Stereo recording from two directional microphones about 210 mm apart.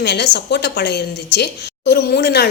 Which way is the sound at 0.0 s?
50° left (ahead or behind).